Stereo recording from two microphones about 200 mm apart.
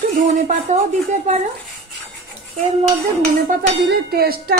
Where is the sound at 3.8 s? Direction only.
50° right (ahead or behind).